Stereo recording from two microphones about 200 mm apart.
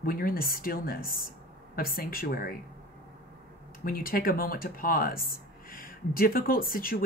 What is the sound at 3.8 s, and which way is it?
Speech, 45° left (ahead or behind).